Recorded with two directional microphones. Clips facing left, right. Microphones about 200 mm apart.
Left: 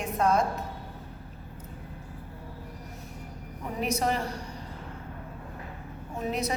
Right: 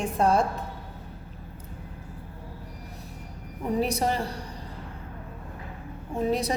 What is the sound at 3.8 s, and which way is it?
Speech, 35° right (ahead or behind).